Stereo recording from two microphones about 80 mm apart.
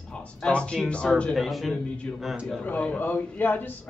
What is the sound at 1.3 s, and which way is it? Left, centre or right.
Speech, centre.